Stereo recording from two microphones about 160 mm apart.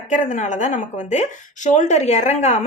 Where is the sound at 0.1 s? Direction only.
50° left (ahead or behind).